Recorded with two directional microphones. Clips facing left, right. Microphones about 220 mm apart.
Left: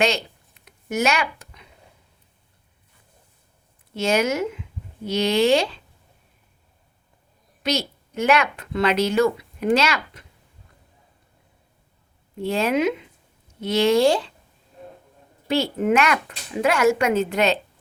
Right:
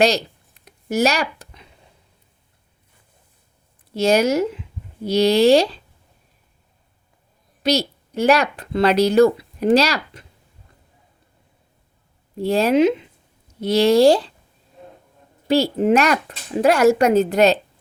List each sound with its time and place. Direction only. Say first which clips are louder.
0.0 s a sound: right 5 dB; 35° right (ahead or behind)
3.9 s speech: right 5 dB; 35° right (ahead or behind)
7.6 s speech: right 5 dB; 35° right (ahead or behind)
12.4 s speech: right 5 dB; 35° right (ahead or behind)
15.4 s speech: right 4 dB; 35° right (ahead or behind)